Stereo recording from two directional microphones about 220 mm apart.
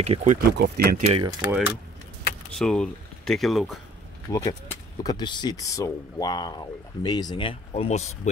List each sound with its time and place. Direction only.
0.0 s speech: 30° right (ahead or behind)
0.4 s speech: 45° right (ahead or behind)
1.1 s speech: 20° right (ahead or behind)
2.5 s speech: 5° left (ahead or behind)
4.3 s speech: 15° left (ahead or behind)